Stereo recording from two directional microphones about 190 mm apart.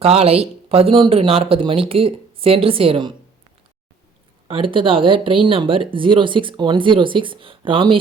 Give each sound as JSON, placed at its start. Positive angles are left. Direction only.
{"t": 0.0, "sound": "speech", "side_deg": -30}
{"t": 4.4, "sound": "speech", "side_deg": -25}